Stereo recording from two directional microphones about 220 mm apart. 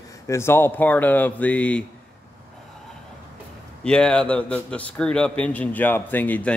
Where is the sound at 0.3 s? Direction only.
10° left (ahead or behind).